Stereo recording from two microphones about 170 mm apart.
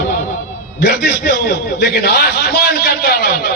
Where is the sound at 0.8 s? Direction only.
75° left (ahead or behind).